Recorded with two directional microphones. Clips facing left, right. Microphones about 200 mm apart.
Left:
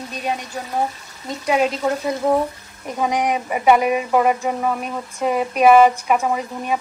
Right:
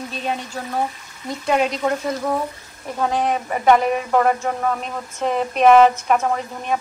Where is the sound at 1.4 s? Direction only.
5° left (ahead or behind).